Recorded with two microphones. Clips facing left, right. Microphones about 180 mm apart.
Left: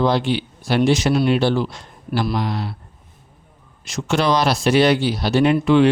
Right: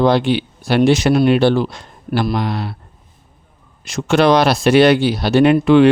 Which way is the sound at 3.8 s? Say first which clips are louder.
Right 6 dB; 60° right (ahead or behind).